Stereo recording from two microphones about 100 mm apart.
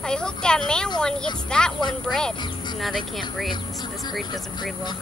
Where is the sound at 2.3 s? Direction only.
50° left (ahead or behind).